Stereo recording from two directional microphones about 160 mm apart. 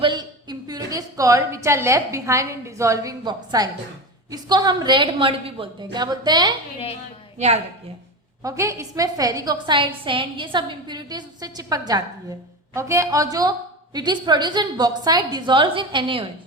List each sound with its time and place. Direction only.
0.0 s a woman's voice: 25° right (ahead or behind)
7.3 s a woman's voice: 45° right (ahead or behind)
8.4 s a woman's voice: 20° right (ahead or behind)